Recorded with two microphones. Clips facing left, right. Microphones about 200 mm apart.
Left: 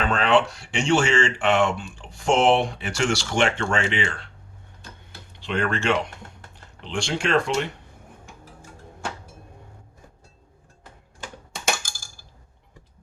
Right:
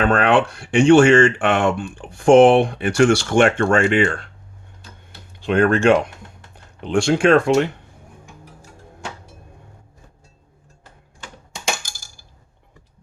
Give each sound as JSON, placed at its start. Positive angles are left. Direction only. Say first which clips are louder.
{"t": 0.0, "sound": "speech", "louder": "right 4 dB", "side_deg": -55}
{"t": 5.5, "sound": "speech", "louder": "right 9 dB", "side_deg": -50}